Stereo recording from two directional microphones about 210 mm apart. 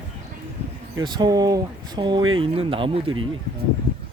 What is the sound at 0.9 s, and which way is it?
Speech, 20° right (ahead or behind).